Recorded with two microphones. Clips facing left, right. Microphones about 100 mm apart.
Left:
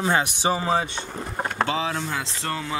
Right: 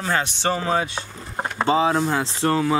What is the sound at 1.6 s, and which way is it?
Speech, 35° right (ahead or behind).